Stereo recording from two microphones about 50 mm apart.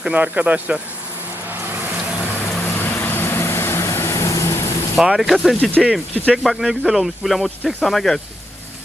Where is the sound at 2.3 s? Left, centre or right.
Left.